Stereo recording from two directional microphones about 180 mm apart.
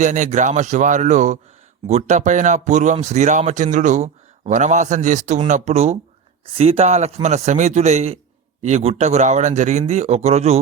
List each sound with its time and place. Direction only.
0.0 s speech: 45° right (ahead or behind)